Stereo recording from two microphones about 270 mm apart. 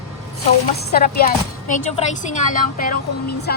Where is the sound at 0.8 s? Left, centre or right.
Left.